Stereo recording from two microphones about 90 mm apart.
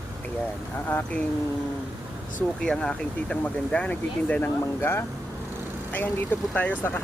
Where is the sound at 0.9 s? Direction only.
20° left (ahead or behind).